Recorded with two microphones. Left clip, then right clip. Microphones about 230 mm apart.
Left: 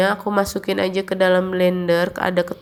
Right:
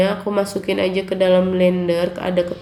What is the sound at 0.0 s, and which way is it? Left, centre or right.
Speech, left.